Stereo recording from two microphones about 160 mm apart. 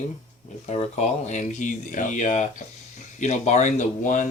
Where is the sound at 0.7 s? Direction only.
40° left (ahead or behind).